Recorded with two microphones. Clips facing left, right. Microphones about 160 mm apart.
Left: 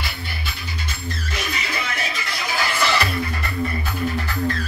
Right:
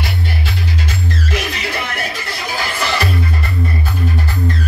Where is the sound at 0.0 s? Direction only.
85° right; by 2.1 s 55° right (ahead or behind).